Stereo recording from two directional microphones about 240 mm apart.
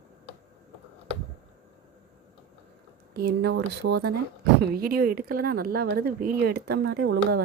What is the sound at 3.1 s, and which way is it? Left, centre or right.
Speech, right.